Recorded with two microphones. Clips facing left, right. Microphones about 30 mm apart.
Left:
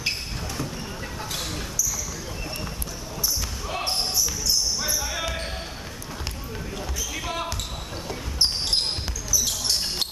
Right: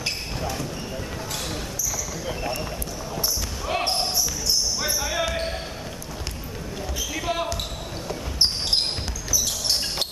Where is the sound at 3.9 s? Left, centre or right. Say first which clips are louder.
Right 1 dB; centre.